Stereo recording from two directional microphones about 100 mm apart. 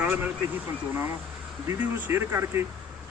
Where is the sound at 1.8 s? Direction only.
20° right (ahead or behind).